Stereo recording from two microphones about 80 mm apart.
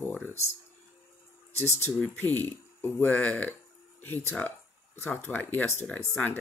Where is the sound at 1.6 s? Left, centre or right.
Left.